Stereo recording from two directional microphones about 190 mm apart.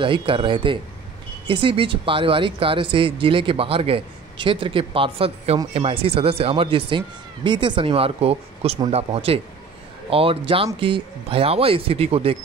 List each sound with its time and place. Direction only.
0.0 s speech: 25° right (ahead or behind)